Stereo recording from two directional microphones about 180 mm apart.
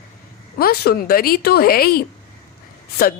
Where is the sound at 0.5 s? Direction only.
60° left (ahead or behind).